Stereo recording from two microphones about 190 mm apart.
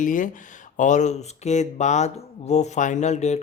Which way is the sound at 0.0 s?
45° left (ahead or behind).